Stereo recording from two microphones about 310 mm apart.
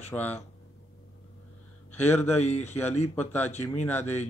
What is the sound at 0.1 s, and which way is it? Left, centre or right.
Speech, centre.